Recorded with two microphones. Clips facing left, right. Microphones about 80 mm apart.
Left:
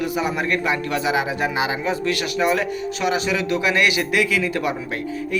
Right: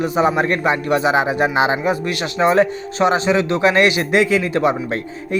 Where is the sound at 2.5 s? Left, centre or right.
Right.